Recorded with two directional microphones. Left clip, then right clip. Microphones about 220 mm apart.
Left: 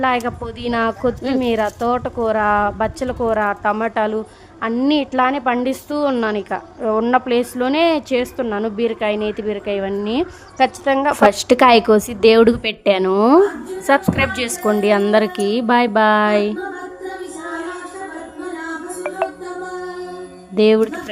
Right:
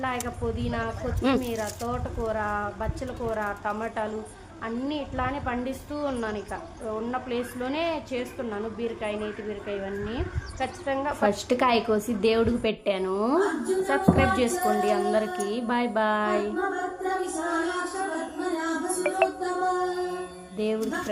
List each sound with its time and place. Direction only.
0.0 s a woman's voice: 50° left (ahead or behind)
20.6 s a woman's voice: 50° left (ahead or behind)